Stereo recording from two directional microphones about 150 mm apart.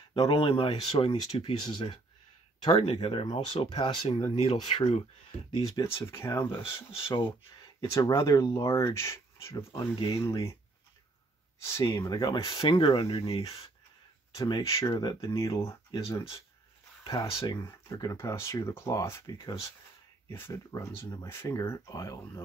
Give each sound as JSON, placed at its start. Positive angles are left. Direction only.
{"t": 0.1, "sound": "speech", "side_deg": 35}
{"t": 5.5, "sound": "speech", "side_deg": 25}
{"t": 7.9, "sound": "speech", "side_deg": 20}
{"t": 9.9, "sound": "speech", "side_deg": 30}
{"t": 10.2, "sound": "speech", "side_deg": 20}
{"t": 11.6, "sound": "speech", "side_deg": 20}
{"t": 14.3, "sound": "speech", "side_deg": 25}